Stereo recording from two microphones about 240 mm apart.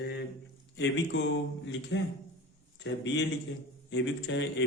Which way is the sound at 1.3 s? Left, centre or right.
Left.